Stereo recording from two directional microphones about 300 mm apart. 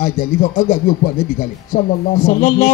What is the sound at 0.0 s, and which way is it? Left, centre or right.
Speech, left.